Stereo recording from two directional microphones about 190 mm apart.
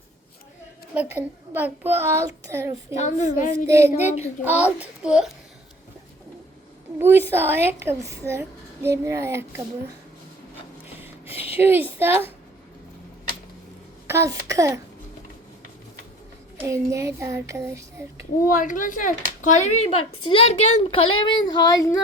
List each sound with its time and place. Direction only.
0.9 s a child's voice: 10° right (ahead or behind)
2.9 s speech: 40° left (ahead or behind)
3.7 s a child's voice: 15° right (ahead or behind)
7.0 s a child's voice: 10° right (ahead or behind)
11.0 s a sound: 10° right (ahead or behind)
11.5 s a child's voice: 10° right (ahead or behind)
14.1 s a child's voice: 15° right (ahead or behind)
16.6 s a child's voice: 15° right (ahead or behind)
18.4 s speech: 45° left (ahead or behind); by 22.0 s 20° left (ahead or behind)